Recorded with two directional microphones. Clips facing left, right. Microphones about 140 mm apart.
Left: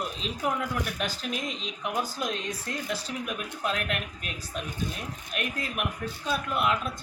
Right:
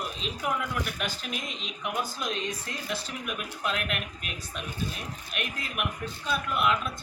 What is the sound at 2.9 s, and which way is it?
Speech, 40° left (ahead or behind).